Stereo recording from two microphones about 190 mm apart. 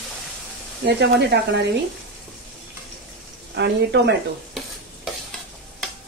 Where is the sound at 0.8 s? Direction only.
65° right (ahead or behind).